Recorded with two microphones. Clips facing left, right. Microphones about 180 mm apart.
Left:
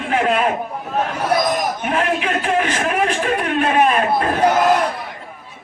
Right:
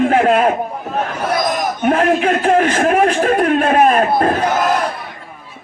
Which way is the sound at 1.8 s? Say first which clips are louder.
Right 6 dB; 45° right (ahead or behind).